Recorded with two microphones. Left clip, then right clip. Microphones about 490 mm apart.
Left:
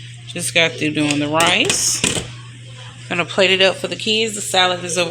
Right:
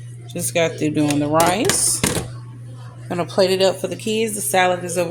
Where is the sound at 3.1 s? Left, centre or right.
Right.